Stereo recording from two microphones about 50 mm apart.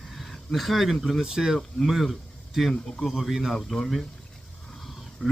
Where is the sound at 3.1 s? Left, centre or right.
Centre.